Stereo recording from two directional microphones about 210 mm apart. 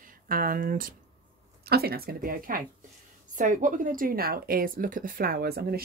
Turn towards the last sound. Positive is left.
turn(degrees=-45)  # may be behind; listen again after turning